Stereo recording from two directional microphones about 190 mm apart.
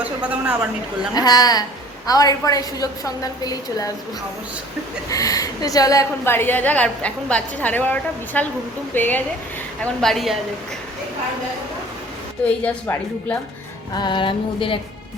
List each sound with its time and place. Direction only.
0.0 s speech: 5° right (ahead or behind)
1.1 s a woman's voice: 20° left (ahead or behind)
5.0 s a woman's voice: 20° left (ahead or behind); by 10.3 s centre (ahead or behind)
12.6 s a woman's voice: 10° left (ahead or behind)
13.9 s a woman's voice: 25° left (ahead or behind)